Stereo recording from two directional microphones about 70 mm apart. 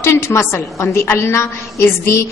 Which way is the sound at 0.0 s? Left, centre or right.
Left.